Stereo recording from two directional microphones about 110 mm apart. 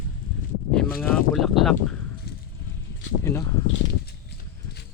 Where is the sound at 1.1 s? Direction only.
5° left (ahead or behind).